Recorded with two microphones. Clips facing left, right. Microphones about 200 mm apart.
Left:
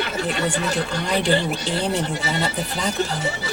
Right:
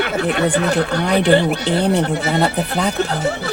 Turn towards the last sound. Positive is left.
turn(degrees=-60)  # may be behind; listen again after turning